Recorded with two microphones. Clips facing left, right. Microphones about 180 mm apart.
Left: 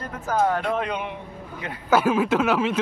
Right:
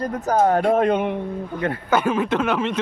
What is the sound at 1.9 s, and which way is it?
Speech, 5° left (ahead or behind).